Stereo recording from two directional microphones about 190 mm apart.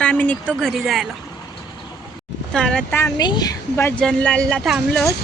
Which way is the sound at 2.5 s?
5° left (ahead or behind).